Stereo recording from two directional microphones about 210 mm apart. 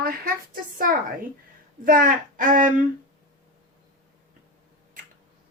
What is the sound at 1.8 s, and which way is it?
Speech, 40° right (ahead or behind).